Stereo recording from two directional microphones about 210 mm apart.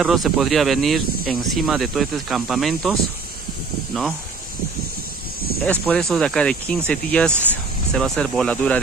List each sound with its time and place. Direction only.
0.0 s speech: centre (ahead or behind)
5.7 s speech: 5° left (ahead or behind)